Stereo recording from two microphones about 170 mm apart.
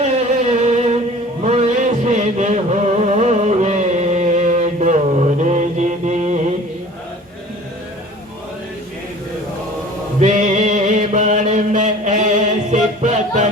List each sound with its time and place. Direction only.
0.6 s music: 40° right (ahead or behind)
10.2 s mantra: 45° right (ahead or behind)